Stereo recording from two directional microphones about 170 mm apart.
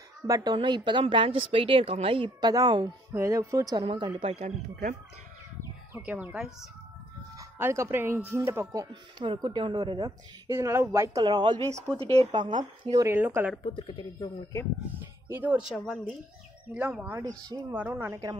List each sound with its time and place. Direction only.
0.3 s a woman's voice: 25° right (ahead or behind)
6.0 s speech: 10° right (ahead or behind)
7.3 s speech: 15° right (ahead or behind)
9.2 s a woman's voice: 30° right (ahead or behind)
11.2 s a woman's voice: 25° right (ahead or behind)
13.0 s speech: 10° right (ahead or behind)
13.7 s speech: 30° left (ahead or behind)
15.2 s speech: 10° right (ahead or behind)
15.7 s a woman's voice: 5° left (ahead or behind)
16.7 s speech: 5° right (ahead or behind)